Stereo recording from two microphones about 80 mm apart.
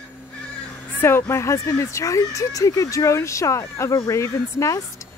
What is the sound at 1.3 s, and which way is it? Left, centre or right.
Speech, left.